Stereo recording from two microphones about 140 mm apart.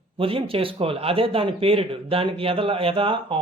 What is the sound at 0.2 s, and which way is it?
Speech, 40° right (ahead or behind).